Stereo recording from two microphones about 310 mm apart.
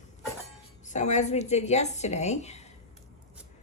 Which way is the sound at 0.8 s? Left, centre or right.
Left.